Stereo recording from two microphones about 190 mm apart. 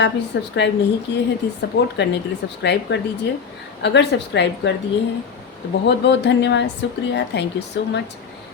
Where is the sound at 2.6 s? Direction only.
65° left (ahead or behind).